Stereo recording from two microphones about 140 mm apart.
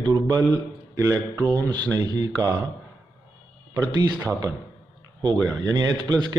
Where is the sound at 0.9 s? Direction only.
20° right (ahead or behind).